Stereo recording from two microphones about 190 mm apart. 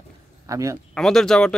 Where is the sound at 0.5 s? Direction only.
15° right (ahead or behind).